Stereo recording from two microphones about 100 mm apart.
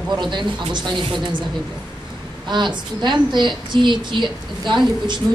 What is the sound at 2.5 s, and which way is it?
Speech, 50° right (ahead or behind).